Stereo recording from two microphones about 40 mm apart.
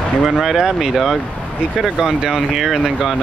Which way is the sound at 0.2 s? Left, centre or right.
Centre.